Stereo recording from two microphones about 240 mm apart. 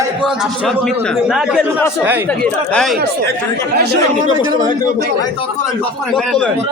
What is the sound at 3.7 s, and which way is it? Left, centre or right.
Speech, right.